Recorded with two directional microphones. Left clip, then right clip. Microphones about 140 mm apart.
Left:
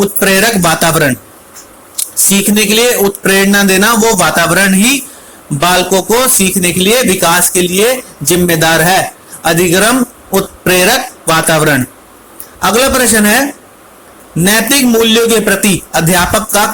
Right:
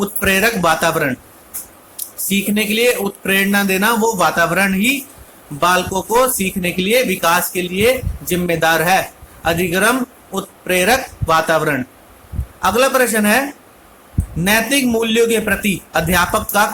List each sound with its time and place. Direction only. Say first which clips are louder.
0.0 s a man's voice: left 6 dB; 30° left (ahead or behind)
2.3 s a man's voice: left 7 dB; 30° left (ahead or behind)
14.4 s a man's voice: left 5 dB; 30° left (ahead or behind)